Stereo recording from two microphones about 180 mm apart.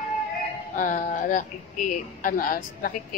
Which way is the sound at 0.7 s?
45° left (ahead or behind).